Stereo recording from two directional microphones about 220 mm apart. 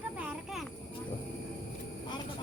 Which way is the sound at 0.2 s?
5° right (ahead or behind).